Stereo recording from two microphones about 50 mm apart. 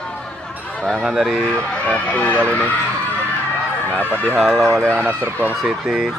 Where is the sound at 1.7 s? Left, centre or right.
Centre.